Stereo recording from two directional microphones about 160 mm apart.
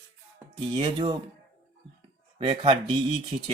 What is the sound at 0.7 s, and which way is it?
Speech, 40° right (ahead or behind).